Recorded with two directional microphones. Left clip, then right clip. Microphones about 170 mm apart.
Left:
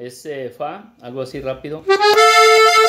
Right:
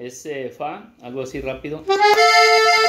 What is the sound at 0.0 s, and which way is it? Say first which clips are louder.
Speech: left 1 dB; 45° left (ahead or behind).